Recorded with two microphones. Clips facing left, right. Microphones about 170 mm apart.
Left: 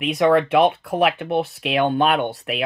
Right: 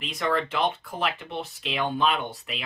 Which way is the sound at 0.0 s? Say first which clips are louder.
Left 11 dB; 65° left (ahead or behind).